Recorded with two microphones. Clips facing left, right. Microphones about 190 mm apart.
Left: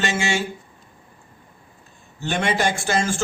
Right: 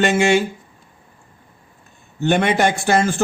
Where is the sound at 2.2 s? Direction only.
60° right (ahead or behind).